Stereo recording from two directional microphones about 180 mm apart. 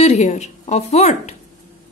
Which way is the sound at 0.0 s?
40° left (ahead or behind).